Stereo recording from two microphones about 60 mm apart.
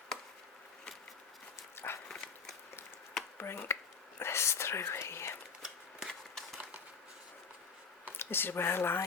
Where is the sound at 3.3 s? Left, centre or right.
Left.